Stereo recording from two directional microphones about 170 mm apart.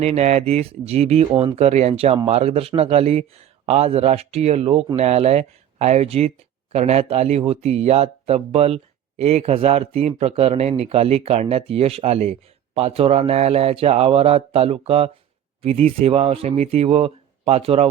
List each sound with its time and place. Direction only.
0.0 s speech: 40° right (ahead or behind)